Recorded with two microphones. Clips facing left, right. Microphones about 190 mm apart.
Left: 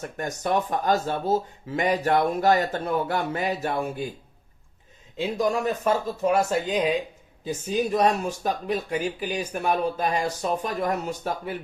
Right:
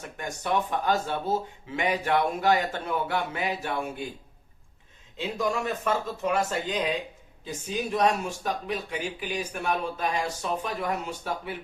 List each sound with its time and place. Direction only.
0.2 s speech: 40° left (ahead or behind)
5.1 s speech: 40° left (ahead or behind)
7.9 s speech: 40° left (ahead or behind)